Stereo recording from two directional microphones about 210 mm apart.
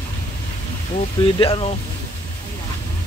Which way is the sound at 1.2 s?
25° left (ahead or behind).